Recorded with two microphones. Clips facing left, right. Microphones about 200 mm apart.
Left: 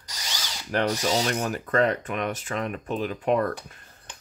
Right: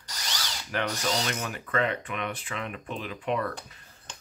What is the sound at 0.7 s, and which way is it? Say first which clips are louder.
Drill: left 6 dB; 40° left (ahead or behind).